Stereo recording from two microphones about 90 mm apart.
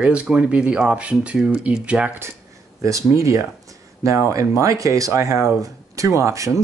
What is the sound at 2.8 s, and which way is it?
Speech, 35° right (ahead or behind).